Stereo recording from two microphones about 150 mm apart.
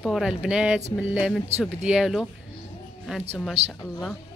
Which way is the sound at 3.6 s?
45° right (ahead or behind).